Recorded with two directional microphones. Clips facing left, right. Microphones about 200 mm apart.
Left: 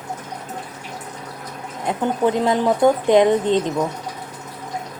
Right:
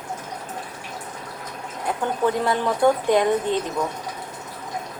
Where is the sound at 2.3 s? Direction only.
20° left (ahead or behind).